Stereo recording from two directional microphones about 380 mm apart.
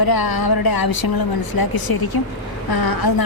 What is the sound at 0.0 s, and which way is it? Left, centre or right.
A woman's voice, left.